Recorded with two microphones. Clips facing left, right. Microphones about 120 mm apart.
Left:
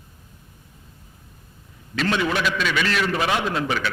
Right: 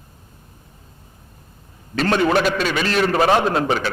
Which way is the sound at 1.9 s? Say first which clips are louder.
Right 5 dB; 45° right (ahead or behind).